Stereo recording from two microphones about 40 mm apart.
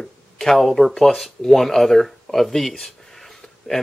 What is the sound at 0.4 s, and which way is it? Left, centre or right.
Speech, centre.